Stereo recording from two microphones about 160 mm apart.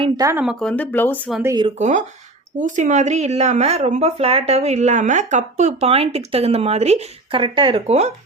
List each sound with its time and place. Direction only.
0.2 s speech: 15° right (ahead or behind)
0.4 s speech: 5° left (ahead or behind)
1.8 s speech: 50° right (ahead or behind)